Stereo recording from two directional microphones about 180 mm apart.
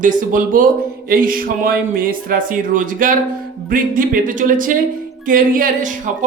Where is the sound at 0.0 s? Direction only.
45° right (ahead or behind).